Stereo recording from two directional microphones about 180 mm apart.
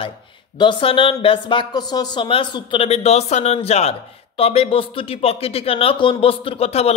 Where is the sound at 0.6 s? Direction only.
25° left (ahead or behind).